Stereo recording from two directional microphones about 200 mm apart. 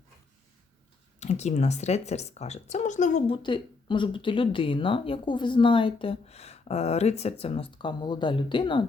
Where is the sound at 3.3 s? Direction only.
25° left (ahead or behind).